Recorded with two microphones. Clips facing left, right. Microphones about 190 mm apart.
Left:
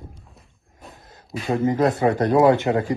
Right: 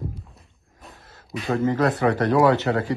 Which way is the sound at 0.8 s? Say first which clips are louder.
Left 2 dB; centre (ahead or behind).